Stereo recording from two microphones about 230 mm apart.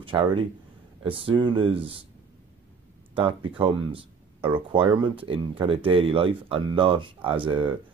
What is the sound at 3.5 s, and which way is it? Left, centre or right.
Speech, right.